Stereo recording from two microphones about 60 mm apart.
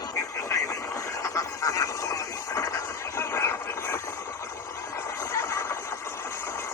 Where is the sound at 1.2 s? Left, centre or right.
Left.